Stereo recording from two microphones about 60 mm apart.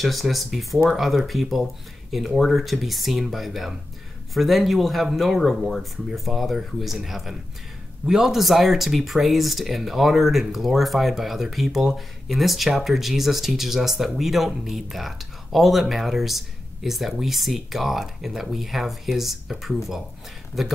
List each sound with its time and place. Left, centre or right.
0.0 s speech: centre